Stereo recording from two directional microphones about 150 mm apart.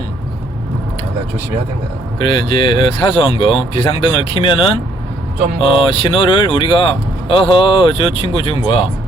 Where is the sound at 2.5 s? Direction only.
35° left (ahead or behind).